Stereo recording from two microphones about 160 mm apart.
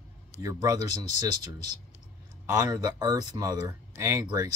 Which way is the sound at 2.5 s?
20° right (ahead or behind).